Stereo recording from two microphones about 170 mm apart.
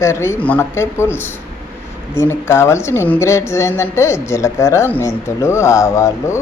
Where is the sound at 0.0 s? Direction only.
15° left (ahead or behind).